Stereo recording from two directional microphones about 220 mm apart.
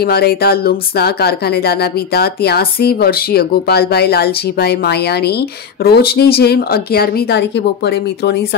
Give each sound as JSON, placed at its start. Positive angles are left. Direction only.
{"t": 0.0, "sound": "speech", "side_deg": 45}